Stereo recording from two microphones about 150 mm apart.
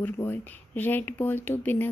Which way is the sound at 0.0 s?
15° left (ahead or behind).